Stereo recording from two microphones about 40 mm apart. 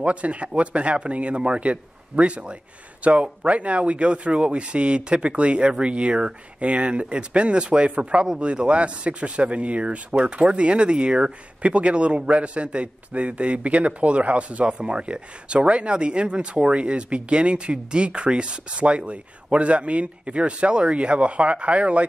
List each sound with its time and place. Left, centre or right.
0.0 s speech: right